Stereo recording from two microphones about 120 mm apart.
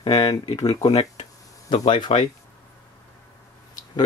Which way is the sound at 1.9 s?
40° left (ahead or behind).